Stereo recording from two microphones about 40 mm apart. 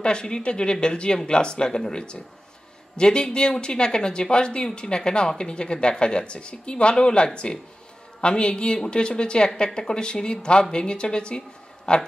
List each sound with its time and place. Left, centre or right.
0.0 s speech: left